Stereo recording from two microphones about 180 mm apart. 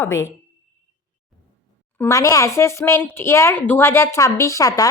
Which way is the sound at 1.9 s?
15° left (ahead or behind).